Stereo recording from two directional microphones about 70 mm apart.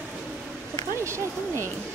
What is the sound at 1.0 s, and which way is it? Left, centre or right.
Speech, right.